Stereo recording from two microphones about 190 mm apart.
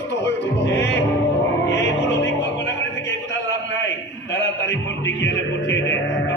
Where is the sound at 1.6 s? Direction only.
70° left (ahead or behind).